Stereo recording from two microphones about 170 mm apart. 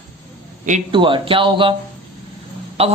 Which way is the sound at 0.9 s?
30° right (ahead or behind).